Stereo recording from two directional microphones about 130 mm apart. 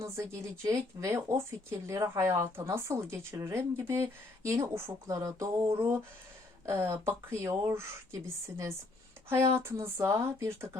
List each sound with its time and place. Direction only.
0.3 s speech: 25° right (ahead or behind)
5.7 s a sound: 15° right (ahead or behind)
6.7 s speech: 20° right (ahead or behind)